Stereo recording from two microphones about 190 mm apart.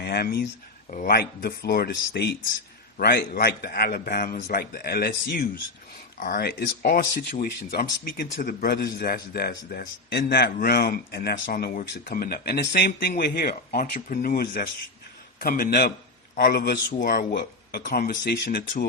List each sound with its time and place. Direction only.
0.0 s speech: 55° left (ahead or behind)